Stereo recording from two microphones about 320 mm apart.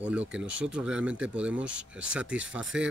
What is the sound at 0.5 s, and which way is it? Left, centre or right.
Speech, right.